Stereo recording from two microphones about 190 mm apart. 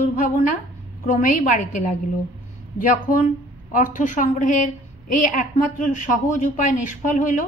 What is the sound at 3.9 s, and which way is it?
A woman's voice, 45° left (ahead or behind).